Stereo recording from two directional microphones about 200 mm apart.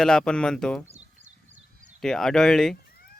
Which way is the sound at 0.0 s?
5° left (ahead or behind).